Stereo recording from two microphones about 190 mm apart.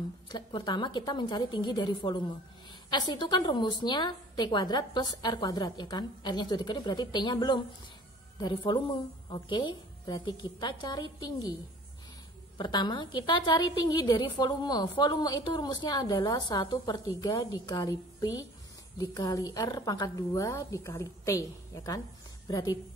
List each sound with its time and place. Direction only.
0.3 s a woman's voice: 25° left (ahead or behind)
12.5 s a woman's voice: 25° left (ahead or behind)